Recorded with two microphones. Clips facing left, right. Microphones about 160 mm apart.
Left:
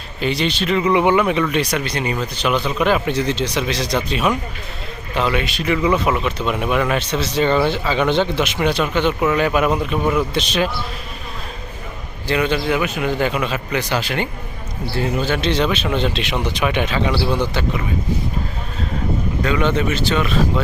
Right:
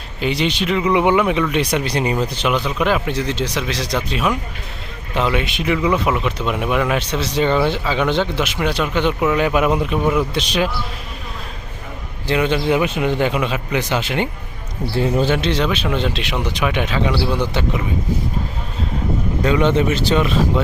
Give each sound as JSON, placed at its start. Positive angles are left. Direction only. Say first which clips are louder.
{"t": 0.2, "sound": "speech", "louder": "right 1 dB", "side_deg": -15}
{"t": 1.7, "sound": "a man's voice", "louder": "right 3 dB", "side_deg": -30}
{"t": 2.5, "sound": "speech", "louder": "left 2 dB", "side_deg": -10}
{"t": 5.1, "sound": "speech", "louder": "right 1 dB", "side_deg": -15}
{"t": 5.7, "sound": "speech", "louder": "left 1 dB", "side_deg": -5}
{"t": 9.0, "sound": "speech", "louder": "right 2 dB", "side_deg": -15}
{"t": 12.3, "sound": "a man's voice", "louder": "right 2 dB", "side_deg": -20}
{"t": 15.3, "sound": "speech", "louder": "even", "side_deg": -5}
{"t": 17.5, "sound": "a man's voice", "louder": "right 1 dB", "side_deg": -20}
{"t": 19.4, "sound": "a man's voice", "louder": "right 3 dB", "side_deg": -25}